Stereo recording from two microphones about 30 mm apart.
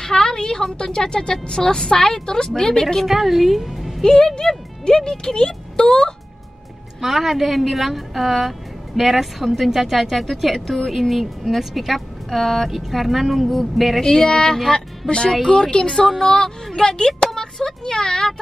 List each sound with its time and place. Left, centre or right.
0.0 s a sound: left
0.8 s a woman's voice: left
2.8 s a woman's voice: centre
3.1 s speech: centre
4.0 s speech: centre
7.0 s a woman's voice: centre
14.0 s a woman's voice: left
16.2 s a woman's voice: centre